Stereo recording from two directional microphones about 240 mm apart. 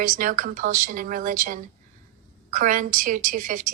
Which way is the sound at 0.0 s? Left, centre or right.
Right.